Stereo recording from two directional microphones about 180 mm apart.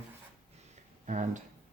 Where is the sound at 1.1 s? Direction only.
40° right (ahead or behind).